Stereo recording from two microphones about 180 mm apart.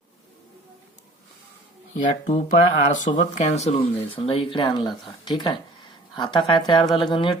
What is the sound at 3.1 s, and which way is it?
Speech, 30° left (ahead or behind).